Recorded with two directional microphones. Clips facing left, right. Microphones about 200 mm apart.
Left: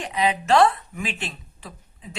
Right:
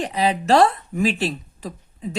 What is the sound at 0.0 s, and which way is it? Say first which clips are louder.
Speech: right 3 dB; 35° right (ahead or behind).